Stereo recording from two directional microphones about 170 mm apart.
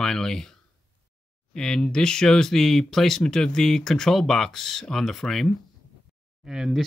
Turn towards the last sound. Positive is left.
turn(degrees=-5)  # may be behind; listen again after turning